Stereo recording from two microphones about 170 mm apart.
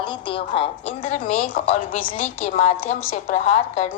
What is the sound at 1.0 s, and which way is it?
A woman's voice, 45° left (ahead or behind).